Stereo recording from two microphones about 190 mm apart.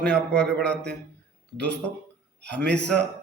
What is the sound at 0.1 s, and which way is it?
Speech, 5° left (ahead or behind).